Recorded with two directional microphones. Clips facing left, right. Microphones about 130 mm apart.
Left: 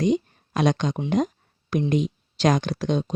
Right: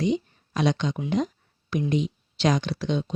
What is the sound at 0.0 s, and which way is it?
Speech, 50° left (ahead or behind).